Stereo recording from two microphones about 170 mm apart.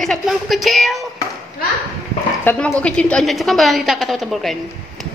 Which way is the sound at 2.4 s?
5° left (ahead or behind).